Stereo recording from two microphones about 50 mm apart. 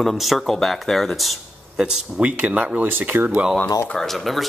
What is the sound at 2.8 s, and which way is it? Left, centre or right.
Speech, right.